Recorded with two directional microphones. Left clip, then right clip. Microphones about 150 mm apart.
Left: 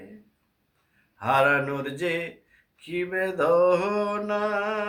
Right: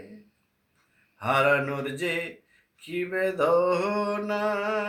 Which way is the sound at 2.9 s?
20° left (ahead or behind).